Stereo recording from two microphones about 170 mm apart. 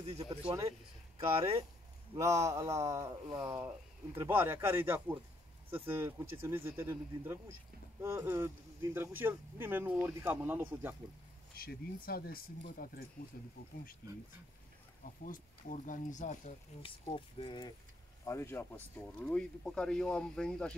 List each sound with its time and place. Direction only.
1.3 s speech: 35° right (ahead or behind)
2.1 s speech: 20° right (ahead or behind)
11.5 s speech: 60° left (ahead or behind)
15.2 s speech: 50° left (ahead or behind)
17.0 s speech: 30° left (ahead or behind)
18.2 s speech: 15° left (ahead or behind)